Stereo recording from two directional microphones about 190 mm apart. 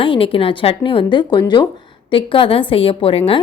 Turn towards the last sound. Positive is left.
turn(degrees=30)  # may be behind; listen again after turning